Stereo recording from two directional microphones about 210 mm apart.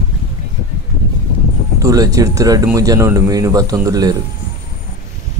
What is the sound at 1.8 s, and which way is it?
Speech, 15° right (ahead or behind).